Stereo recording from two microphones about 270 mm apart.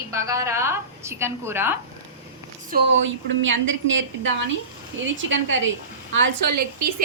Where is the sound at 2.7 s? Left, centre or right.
Right.